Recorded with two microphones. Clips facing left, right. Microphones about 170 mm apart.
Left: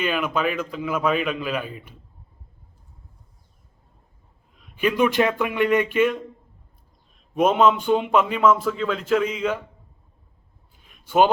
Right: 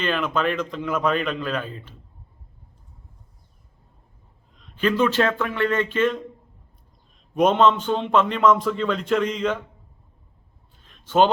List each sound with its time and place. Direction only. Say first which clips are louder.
0.0 s a man's voice: even; 10° left (ahead or behind)
4.5 s a man's voice: even; 10° left (ahead or behind)
7.3 s speech: even; 5° left (ahead or behind)
10.8 s a sound: even; 10° left (ahead or behind)